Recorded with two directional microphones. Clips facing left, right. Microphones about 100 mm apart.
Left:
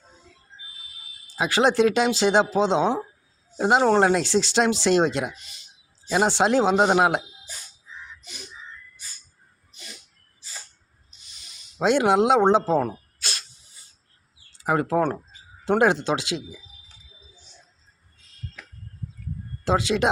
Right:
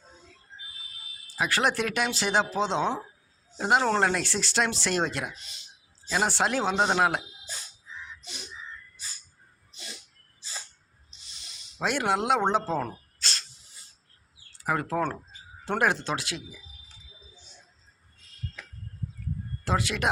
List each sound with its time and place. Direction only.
1.4 s speech: 20° left (ahead or behind)
11.8 s speech: 20° left (ahead or behind)
14.6 s speech: 20° left (ahead or behind)
19.6 s speech: 20° left (ahead or behind)